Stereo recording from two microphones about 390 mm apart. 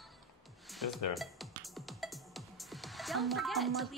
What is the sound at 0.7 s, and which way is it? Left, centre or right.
Music, centre.